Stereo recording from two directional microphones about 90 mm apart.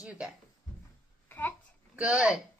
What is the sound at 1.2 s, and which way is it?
Babbling, 20° left (ahead or behind).